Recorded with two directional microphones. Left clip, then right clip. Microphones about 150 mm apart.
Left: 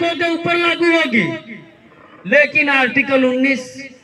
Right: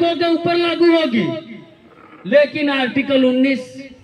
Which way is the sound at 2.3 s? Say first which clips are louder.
Left 2 dB; 35° left (ahead or behind).